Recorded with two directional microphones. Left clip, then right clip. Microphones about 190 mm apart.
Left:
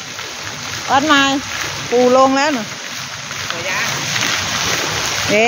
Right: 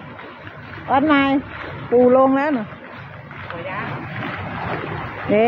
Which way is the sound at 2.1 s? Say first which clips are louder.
Left 3 dB; 10° left (ahead or behind).